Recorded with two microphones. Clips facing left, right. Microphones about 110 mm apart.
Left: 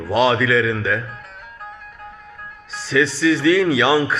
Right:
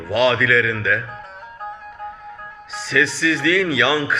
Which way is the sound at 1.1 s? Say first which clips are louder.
Right 3 dB; 25° right (ahead or behind).